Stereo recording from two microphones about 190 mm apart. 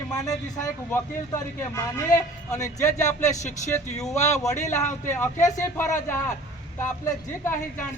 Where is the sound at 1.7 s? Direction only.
15° left (ahead or behind).